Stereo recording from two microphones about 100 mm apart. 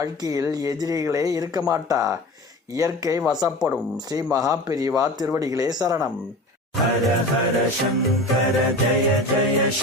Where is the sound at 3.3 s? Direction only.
40° right (ahead or behind).